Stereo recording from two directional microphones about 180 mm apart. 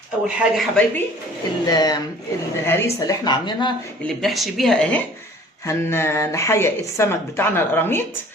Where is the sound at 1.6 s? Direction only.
20° left (ahead or behind).